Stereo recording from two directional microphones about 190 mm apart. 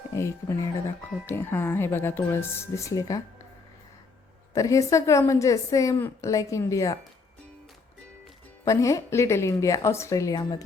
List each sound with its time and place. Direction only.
0.1 s a woman's voice: 15° left (ahead or behind)
4.5 s a woman's voice: 15° left (ahead or behind)
8.6 s a woman's voice: 15° left (ahead or behind)